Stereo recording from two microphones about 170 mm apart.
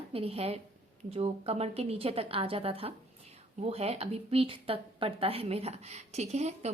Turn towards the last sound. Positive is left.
turn(degrees=-40)  # may be behind; listen again after turning